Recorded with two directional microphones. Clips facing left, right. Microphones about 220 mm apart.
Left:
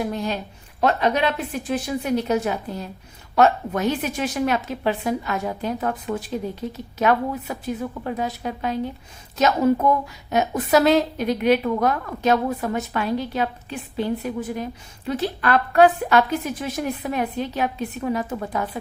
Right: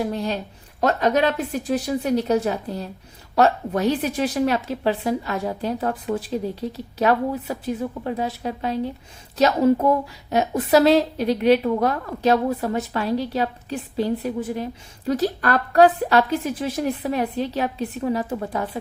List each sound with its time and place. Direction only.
0.0 s a woman's voice: 35° right (ahead or behind)